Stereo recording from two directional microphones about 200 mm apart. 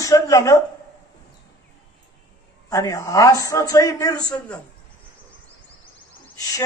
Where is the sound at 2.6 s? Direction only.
15° left (ahead or behind).